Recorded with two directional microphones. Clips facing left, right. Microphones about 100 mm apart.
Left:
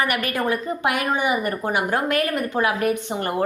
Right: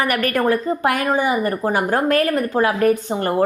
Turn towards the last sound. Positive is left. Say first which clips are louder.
# right 5 dB
turn(degrees=-35)  # may be behind; listen again after turning